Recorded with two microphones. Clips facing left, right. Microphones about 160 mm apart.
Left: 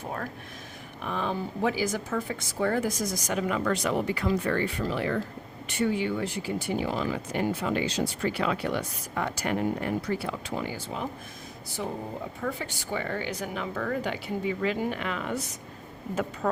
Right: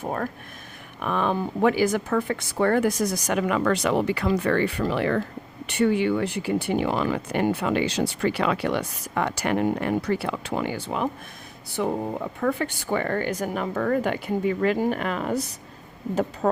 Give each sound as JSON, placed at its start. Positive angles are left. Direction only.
{"t": 0.0, "sound": "speech", "side_deg": -50}